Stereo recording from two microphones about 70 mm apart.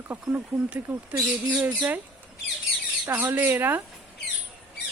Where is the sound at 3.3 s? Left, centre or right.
Right.